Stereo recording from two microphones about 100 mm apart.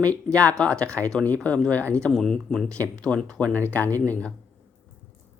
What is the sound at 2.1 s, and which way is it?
Speech, centre (ahead or behind).